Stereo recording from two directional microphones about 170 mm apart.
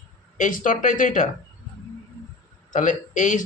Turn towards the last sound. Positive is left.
turn(degrees=45)  # may be behind; listen again after turning